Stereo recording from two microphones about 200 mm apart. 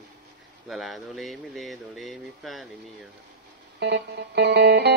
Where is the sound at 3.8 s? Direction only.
60° right (ahead or behind).